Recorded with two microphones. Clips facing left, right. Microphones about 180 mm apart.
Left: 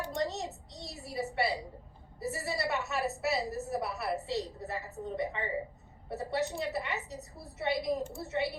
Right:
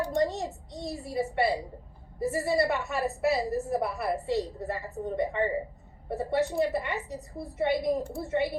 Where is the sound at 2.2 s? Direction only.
55° right (ahead or behind).